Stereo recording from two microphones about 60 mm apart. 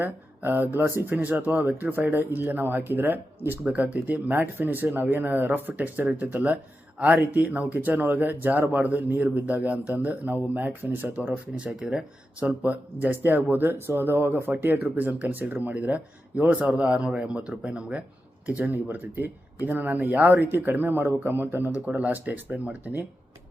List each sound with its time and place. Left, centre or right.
0.0 s speech: right
1.1 s speech: right
18.7 s speech: right
21.8 s speech: right